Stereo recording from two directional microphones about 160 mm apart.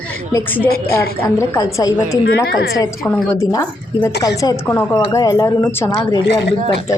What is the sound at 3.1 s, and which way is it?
A woman's voice, 20° left (ahead or behind).